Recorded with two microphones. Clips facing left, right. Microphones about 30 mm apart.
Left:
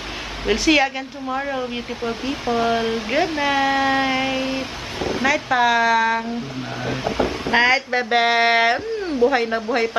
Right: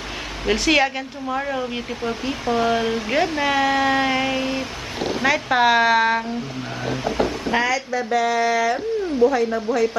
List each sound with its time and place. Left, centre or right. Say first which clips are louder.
0.4 s speech: left 1 dB; centre
5.2 s speech: even; centre
7.5 s speech: left 6 dB; left